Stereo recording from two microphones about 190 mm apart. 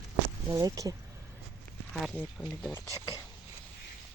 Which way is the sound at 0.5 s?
20° right (ahead or behind).